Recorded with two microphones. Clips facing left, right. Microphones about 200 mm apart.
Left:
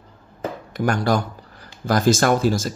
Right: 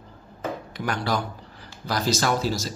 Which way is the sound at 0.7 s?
45° left (ahead or behind).